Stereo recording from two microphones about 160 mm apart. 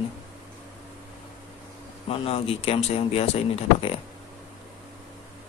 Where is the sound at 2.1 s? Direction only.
35° left (ahead or behind).